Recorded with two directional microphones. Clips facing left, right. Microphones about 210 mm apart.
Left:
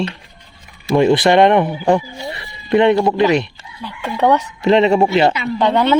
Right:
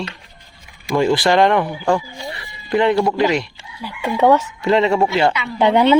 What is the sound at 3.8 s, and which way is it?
Speech, 10° right (ahead or behind).